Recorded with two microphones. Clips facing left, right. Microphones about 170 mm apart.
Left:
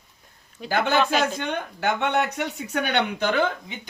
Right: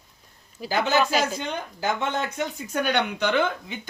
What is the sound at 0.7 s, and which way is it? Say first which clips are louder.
Speech: left 1 dB; 55° left (ahead or behind).